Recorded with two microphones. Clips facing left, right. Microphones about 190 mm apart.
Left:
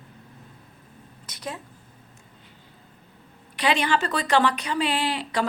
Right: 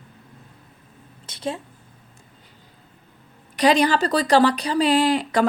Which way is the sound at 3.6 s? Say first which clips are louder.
Right 6 dB; 40° right (ahead or behind).